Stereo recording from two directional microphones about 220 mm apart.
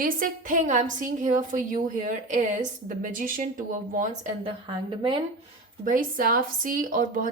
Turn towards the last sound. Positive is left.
turn(degrees=-40)  # may be behind; listen again after turning